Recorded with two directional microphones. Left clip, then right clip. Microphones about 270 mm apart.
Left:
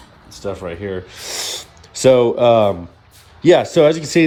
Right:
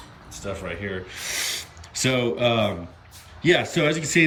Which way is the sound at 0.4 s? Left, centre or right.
Centre.